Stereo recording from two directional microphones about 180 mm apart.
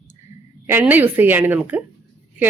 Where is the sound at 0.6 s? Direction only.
10° right (ahead or behind).